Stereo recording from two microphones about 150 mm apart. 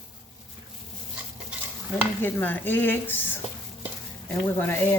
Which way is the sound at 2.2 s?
10° left (ahead or behind).